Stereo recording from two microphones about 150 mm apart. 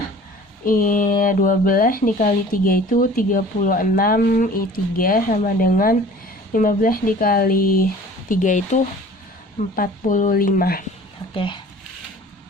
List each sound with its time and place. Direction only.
0.6 s speech: 70° left (ahead or behind)
8.3 s speech: 60° left (ahead or behind)
9.7 s speech: 65° left (ahead or behind)
11.3 s speech: 35° left (ahead or behind)